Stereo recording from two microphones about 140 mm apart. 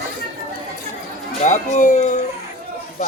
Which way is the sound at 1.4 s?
60° left (ahead or behind).